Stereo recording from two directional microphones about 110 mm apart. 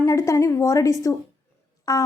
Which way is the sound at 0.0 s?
30° left (ahead or behind).